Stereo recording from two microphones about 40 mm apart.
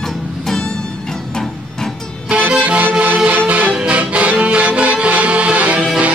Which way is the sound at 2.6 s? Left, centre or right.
Right.